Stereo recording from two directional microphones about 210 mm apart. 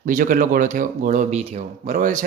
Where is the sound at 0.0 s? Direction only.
40° right (ahead or behind).